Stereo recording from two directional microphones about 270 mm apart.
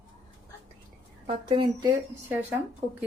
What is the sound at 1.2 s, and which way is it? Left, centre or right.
A woman's voice, centre.